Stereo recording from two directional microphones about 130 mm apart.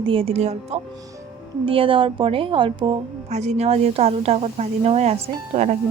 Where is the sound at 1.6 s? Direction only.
45° right (ahead or behind).